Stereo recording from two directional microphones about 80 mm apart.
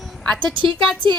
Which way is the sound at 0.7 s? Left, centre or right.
Centre.